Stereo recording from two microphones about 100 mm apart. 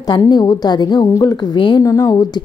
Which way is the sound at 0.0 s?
40° left (ahead or behind).